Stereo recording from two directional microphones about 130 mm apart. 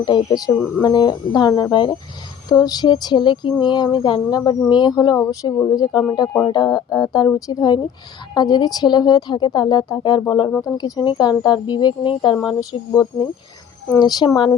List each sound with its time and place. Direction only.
0.0 s speech: 40° left (ahead or behind)